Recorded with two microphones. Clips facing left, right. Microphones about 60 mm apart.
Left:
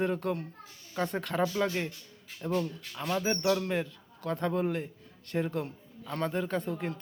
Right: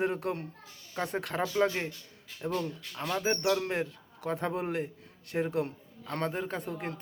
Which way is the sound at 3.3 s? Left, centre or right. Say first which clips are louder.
Right 1 dB; centre.